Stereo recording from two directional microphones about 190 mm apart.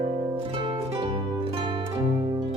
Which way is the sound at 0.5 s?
25° right (ahead or behind).